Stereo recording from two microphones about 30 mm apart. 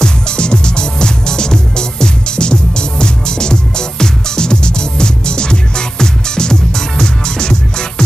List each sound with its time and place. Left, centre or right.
0.0 s music: left